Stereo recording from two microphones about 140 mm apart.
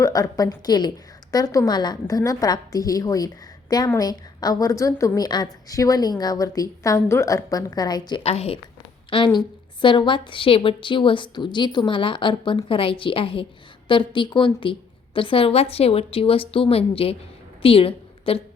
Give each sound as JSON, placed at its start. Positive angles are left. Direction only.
{"t": 0.0, "sound": "a woman's voice", "side_deg": 25}
{"t": 8.2, "sound": "a woman's voice", "side_deg": 45}